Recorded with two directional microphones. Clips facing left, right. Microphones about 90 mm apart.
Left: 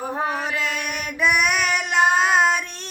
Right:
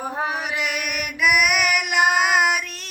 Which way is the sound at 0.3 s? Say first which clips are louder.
Left 1 dB; 15° right (ahead or behind).